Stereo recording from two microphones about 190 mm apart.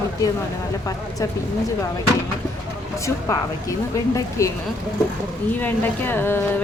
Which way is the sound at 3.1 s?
15° left (ahead or behind).